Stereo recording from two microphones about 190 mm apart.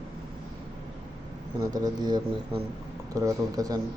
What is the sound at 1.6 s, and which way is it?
Speech, 20° right (ahead or behind).